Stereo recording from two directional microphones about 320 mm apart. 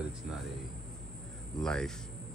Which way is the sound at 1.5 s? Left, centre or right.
Centre.